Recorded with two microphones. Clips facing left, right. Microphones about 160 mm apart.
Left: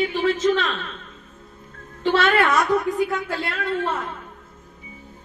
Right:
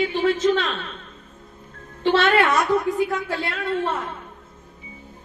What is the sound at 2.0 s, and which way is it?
Speech, 25° right (ahead or behind).